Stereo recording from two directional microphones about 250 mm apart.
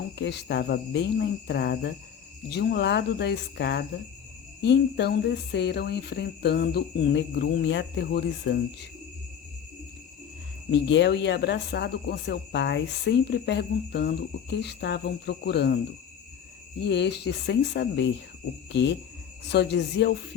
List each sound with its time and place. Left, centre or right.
0.2 s speech: left
10.7 s speech: left
16.8 s speech: left